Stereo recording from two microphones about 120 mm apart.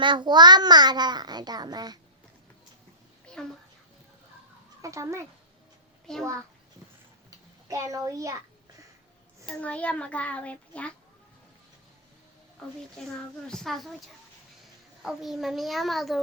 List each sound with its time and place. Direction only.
0.0 s a child's voice: 40° right (ahead or behind)
3.3 s a sound: 10° left (ahead or behind)
4.8 s speech: 25° right (ahead or behind)
6.1 s a child's voice: 5° left (ahead or behind)
7.3 s a sound: 30° right (ahead or behind)
9.5 s a child's voice: 10° left (ahead or behind)
12.6 s a child's voice: 5° left (ahead or behind)
15.0 s a child's voice: centre (ahead or behind)